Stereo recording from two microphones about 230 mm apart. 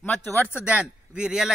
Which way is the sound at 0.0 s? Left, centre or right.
Centre.